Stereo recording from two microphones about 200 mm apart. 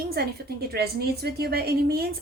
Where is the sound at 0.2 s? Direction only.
50° right (ahead or behind).